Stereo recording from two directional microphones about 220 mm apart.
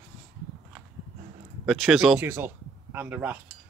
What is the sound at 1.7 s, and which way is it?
Speech, centre (ahead or behind).